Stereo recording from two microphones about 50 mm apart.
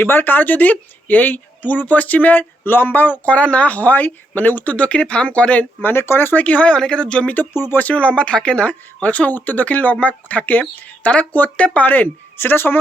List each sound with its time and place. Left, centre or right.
0.0 s speech: left
5.8 s speech: left
6.4 s speech: left
7.5 s speech: left
7.8 s speech: left
8.6 s speech: left
11.9 s speech: left